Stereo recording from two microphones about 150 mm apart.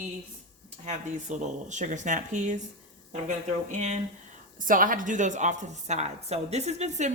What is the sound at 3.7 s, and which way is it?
Speech, 50° right (ahead or behind).